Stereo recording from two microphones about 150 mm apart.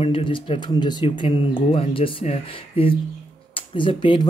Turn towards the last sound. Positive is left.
turn(degrees=35)  # may be behind; listen again after turning